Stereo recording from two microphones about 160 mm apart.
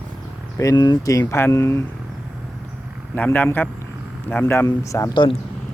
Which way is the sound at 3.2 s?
10° left (ahead or behind).